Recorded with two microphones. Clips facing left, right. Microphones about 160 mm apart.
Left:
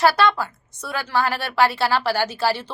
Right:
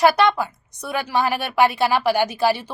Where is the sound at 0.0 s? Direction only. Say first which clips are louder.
Right 2 dB; 20° right (ahead or behind).